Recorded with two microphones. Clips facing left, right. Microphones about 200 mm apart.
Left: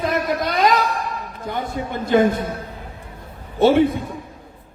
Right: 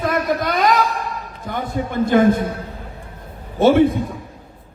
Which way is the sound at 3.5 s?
45° right (ahead or behind).